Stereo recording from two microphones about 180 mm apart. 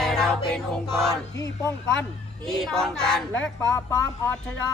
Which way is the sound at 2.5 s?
Centre (ahead or behind).